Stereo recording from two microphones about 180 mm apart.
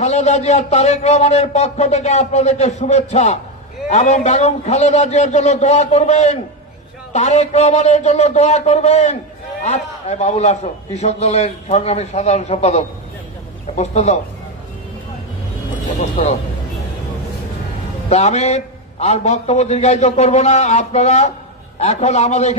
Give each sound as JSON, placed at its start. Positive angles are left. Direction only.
{"t": 0.0, "sound": "a man's voice", "side_deg": 40}
{"t": 16.2, "sound": "a man's voice", "side_deg": 40}
{"t": 18.1, "sound": "a man's voice", "side_deg": 40}